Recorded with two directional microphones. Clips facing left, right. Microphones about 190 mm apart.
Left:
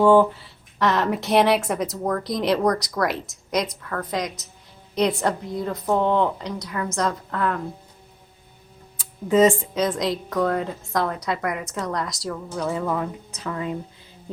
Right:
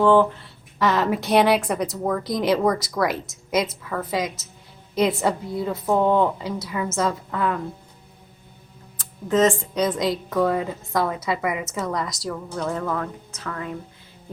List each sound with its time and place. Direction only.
0.0 s speech: 10° left (ahead or behind)
0.8 s a woman's voice: centre (ahead or behind)
9.0 s a sound: 10° left (ahead or behind)
9.7 s a woman's voice: centre (ahead or behind); by 13.7 s 20° left (ahead or behind)